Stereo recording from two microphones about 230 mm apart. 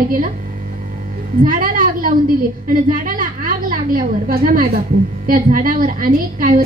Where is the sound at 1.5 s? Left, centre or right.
Right.